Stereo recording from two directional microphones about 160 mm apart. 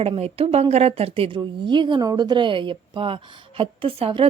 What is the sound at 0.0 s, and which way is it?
A woman's voice, 35° right (ahead or behind).